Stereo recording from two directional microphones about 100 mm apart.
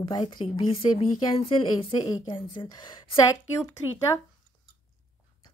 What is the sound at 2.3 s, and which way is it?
Speech, 55° left (ahead or behind).